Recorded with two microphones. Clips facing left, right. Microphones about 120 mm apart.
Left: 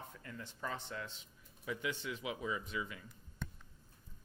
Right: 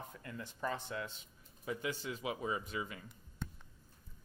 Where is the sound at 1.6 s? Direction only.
35° right (ahead or behind).